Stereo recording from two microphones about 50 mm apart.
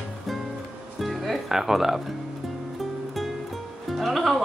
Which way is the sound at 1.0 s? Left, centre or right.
Centre.